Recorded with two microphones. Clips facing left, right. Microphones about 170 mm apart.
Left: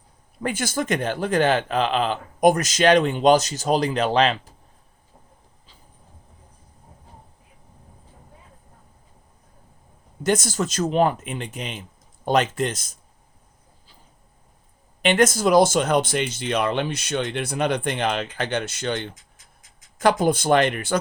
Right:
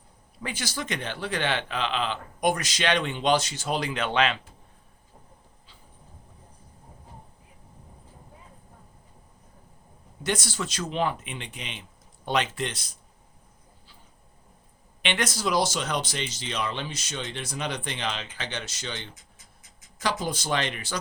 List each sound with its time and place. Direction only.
0.4 s speech: 50° left (ahead or behind)
10.2 s speech: 45° left (ahead or behind)
15.0 s speech: 45° left (ahead or behind)